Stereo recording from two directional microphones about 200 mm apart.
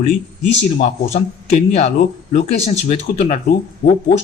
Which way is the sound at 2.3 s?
30° left (ahead or behind).